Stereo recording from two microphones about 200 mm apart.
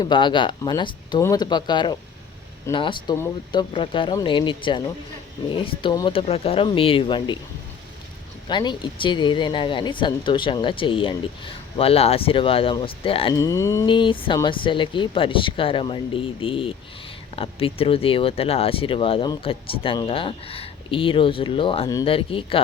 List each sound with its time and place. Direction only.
0.0 s speech: 25° left (ahead or behind)
8.4 s speech: 25° left (ahead or behind)